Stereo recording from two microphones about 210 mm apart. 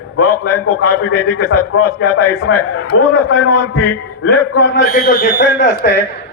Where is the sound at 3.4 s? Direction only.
75° left (ahead or behind).